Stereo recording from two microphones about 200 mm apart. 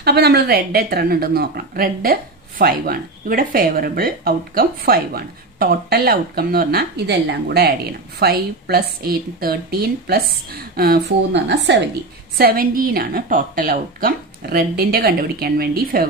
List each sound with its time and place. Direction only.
0.0 s speech: 55° right (ahead or behind)
12.4 s speech: 50° right (ahead or behind)